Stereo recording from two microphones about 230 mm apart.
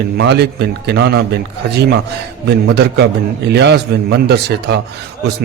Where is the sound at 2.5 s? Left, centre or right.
Right.